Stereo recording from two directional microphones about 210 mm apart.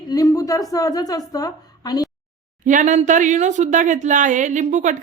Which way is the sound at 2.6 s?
35° right (ahead or behind).